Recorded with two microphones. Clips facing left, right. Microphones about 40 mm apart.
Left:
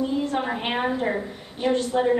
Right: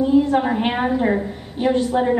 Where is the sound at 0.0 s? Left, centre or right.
Centre.